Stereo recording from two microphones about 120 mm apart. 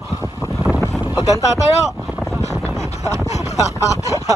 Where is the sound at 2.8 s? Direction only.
25° right (ahead or behind).